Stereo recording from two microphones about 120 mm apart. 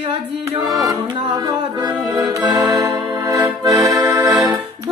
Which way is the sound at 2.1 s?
35° right (ahead or behind).